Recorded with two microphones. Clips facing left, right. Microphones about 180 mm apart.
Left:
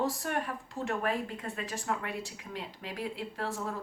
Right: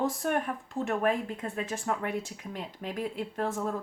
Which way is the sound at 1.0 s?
45° right (ahead or behind).